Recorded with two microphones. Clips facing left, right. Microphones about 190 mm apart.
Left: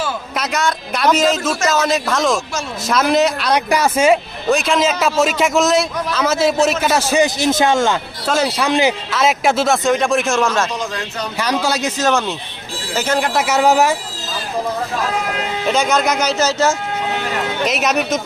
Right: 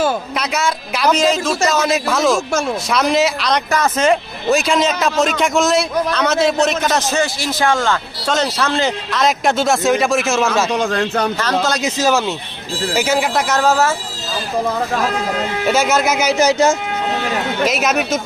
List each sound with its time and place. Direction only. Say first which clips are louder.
0.3 s a man's voice: even; centre (ahead or behind); by 7.9 s 20° left (ahead or behind)
8.3 s a man's voice: left 1 dB; 10° left (ahead or behind); by 10.7 s 5° right (ahead or behind)
10.7 s a man's voice: right 7 dB; 60° right (ahead or behind)
11.3 s speech: even; 10° left (ahead or behind)
11.8 s a man's voice: right 1 dB; 5° right (ahead or behind)
13.5 s speech: left 3 dB; 15° left (ahead or behind)
15.6 s speech: right 1 dB; 5° right (ahead or behind)
17.7 s a man's voice: left 1 dB; centre (ahead or behind)